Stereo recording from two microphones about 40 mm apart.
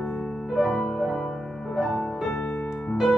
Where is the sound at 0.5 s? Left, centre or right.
Centre.